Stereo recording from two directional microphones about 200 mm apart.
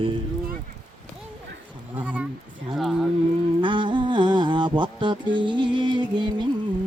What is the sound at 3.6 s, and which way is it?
Music, 25° right (ahead or behind).